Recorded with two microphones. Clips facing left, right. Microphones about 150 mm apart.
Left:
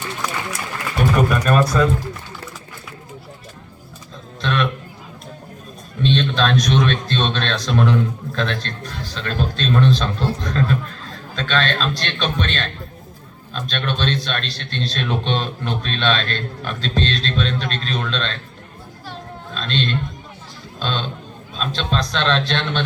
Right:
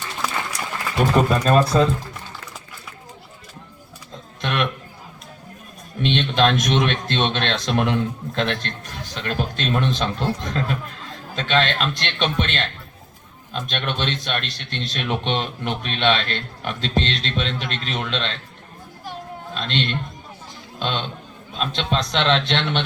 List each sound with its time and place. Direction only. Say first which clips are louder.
1.1 s a man's voice: right 1 dB; 25° right (ahead or behind)
4.4 s a sound: left 2 dB; 20° right (ahead or behind)
6.0 s a man's voice: left 1 dB; 15° right (ahead or behind)
19.5 s a man's voice: left 2 dB; 20° right (ahead or behind)